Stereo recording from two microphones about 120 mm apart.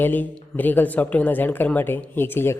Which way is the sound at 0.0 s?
15° left (ahead or behind).